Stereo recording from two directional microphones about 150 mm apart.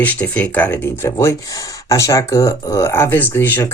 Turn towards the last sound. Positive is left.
turn(degrees=15)  # may be behind; listen again after turning